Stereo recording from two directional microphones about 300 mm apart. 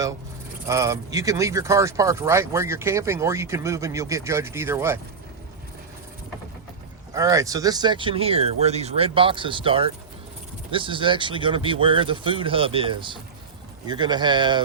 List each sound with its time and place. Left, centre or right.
0.7 s speech: centre
7.1 s speech: centre